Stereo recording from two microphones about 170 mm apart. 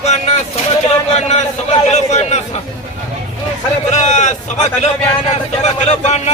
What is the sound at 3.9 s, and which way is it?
Speech, 45° left (ahead or behind).